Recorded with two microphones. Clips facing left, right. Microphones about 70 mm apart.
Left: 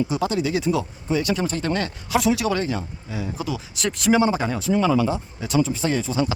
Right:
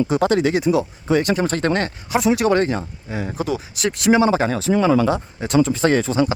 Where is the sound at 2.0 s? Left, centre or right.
Right.